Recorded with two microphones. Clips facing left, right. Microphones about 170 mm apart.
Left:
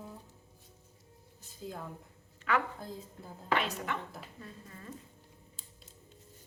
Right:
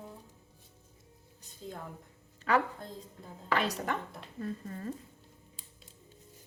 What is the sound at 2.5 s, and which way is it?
Speech, 35° right (ahead or behind).